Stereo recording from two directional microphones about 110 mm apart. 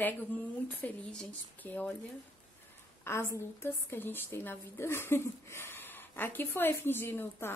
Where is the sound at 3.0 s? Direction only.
20° left (ahead or behind).